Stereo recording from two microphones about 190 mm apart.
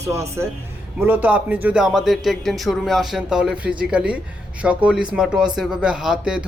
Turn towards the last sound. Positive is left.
turn(degrees=-5)  # may be behind; listen again after turning